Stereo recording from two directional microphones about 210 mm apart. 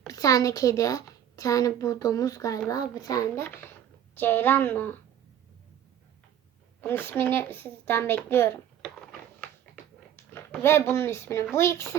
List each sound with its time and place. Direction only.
0.1 s a woman's voice: 15° left (ahead or behind)
6.8 s a woman's voice: 10° left (ahead or behind)
10.3 s a woman's voice: 10° left (ahead or behind)